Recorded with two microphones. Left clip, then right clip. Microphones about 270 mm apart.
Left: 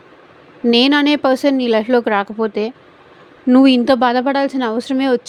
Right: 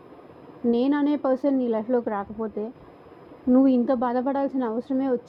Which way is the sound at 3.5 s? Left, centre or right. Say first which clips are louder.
Left 9 dB; left.